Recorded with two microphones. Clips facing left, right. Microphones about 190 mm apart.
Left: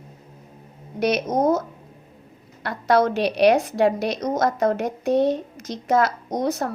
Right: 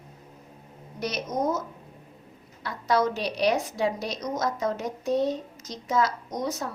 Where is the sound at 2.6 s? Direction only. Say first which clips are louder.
Left 5 dB; 65° left (ahead or behind).